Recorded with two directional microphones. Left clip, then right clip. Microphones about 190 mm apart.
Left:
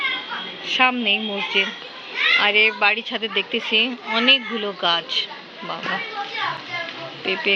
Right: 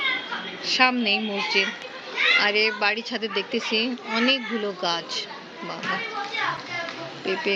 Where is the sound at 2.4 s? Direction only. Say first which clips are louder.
Left 5 dB; 5° left (ahead or behind).